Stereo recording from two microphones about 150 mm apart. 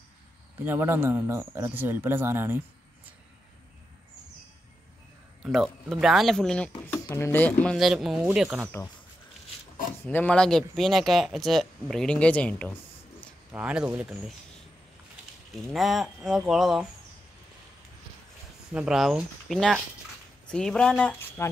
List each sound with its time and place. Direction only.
0.7 s speech: 15° right (ahead or behind)
5.4 s speech: centre (ahead or behind)
6.9 s speech: 20° left (ahead or behind); by 8.6 s 5° right (ahead or behind)
10.0 s speech: 10° left (ahead or behind)
13.5 s speech: 10° right (ahead or behind)
15.5 s speech: centre (ahead or behind)
18.7 s speech: 5° right (ahead or behind)
21.4 s speech: 20° left (ahead or behind)